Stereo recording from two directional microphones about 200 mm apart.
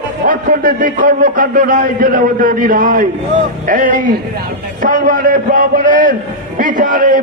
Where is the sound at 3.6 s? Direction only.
40° right (ahead or behind).